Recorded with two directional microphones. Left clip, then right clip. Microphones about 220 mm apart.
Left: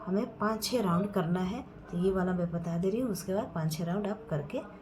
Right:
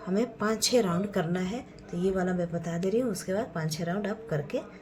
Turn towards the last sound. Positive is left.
turn(degrees=-35)  # may be behind; listen again after turning